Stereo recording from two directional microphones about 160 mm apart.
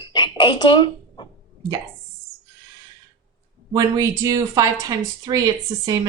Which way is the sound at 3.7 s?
25° right (ahead or behind).